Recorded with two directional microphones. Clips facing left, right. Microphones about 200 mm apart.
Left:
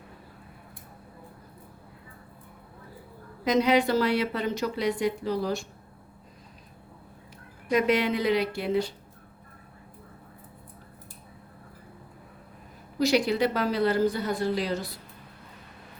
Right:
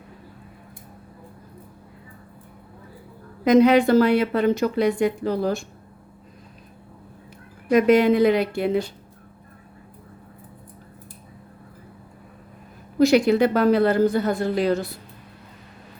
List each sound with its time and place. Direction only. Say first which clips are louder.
3.4 s speech: right 7 dB; 55° right (ahead or behind)
7.7 s speech: right 8 dB; 50° right (ahead or behind)
13.0 s speech: right 7 dB; 55° right (ahead or behind)